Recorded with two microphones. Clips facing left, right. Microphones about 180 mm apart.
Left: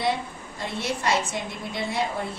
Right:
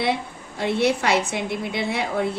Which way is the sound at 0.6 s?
65° right (ahead or behind).